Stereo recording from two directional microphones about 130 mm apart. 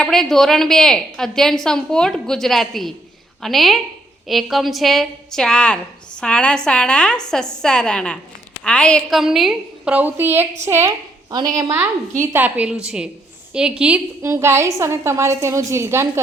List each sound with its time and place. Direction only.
0.0 s a woman's voice: centre (ahead or behind); by 11.3 s 20° right (ahead or behind)
11.3 s a woman's voice: 30° right (ahead or behind)
12.2 s a woman's voice: 15° right (ahead or behind)
14.2 s a woman's voice: 20° right (ahead or behind)